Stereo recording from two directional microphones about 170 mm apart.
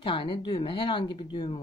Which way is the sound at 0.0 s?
30° left (ahead or behind).